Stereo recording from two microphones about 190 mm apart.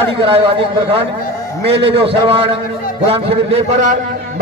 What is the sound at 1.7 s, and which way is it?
A man's voice, 30° right (ahead or behind).